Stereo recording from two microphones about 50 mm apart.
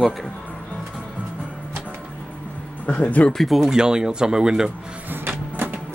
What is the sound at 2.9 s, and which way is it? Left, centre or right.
Speech, left.